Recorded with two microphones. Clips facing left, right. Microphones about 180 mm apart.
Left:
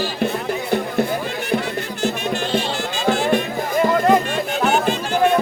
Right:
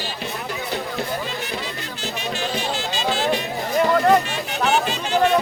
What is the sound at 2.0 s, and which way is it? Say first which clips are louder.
Music: left 5 dB; 55° left (ahead or behind).